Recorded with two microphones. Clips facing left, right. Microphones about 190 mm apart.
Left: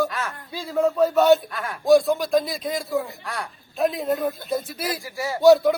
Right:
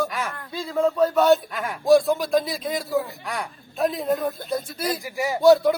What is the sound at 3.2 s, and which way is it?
Speech, 15° right (ahead or behind).